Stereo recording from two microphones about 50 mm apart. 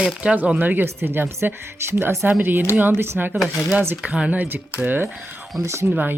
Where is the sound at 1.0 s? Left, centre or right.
Right.